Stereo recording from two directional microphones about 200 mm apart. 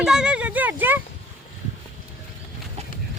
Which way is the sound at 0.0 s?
5° right (ahead or behind).